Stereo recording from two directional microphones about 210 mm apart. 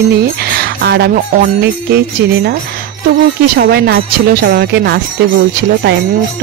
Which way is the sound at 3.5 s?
50° right (ahead or behind).